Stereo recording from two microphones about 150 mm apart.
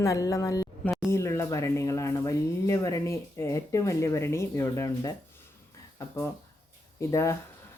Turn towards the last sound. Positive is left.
turn(degrees=20)  # may be behind; listen again after turning